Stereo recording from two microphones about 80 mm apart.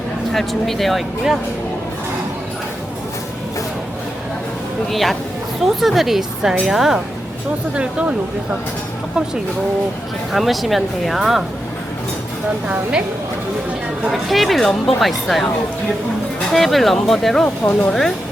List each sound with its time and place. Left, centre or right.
0.3 s speech: centre
4.9 s a woman's voice: centre
10.3 s speech: centre
12.6 s a woman's voice: centre
14.0 s speech: centre
16.5 s speech: centre